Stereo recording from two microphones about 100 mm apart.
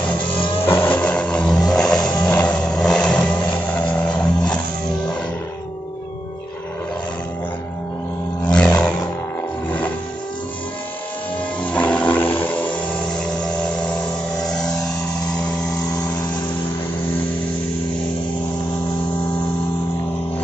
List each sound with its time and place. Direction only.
0.0 s vehicle: 15° left (ahead or behind)
0.7 s music: 20° left (ahead or behind)
2.2 s vehicle: 10° left (ahead or behind)
8.5 s roar: 10° left (ahead or behind)
11.6 s music: 15° left (ahead or behind)
13.6 s a sound: 10° left (ahead or behind)
14.3 s vehicle: 5° left (ahead or behind)
15.3 s a sound: 10° left (ahead or behind)
15.7 s vehicle: 40° left (ahead or behind)